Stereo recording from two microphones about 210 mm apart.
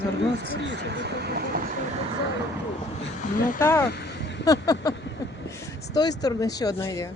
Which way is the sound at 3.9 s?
50° left (ahead or behind).